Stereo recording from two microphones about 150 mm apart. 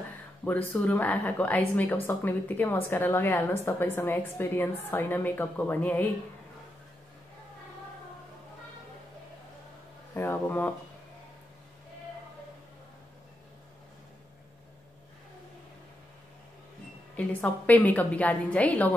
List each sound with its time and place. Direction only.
0.5 s a woman's voice: 10° left (ahead or behind)
10.1 s speech: 15° left (ahead or behind)
17.2 s a woman's voice: 10° left (ahead or behind)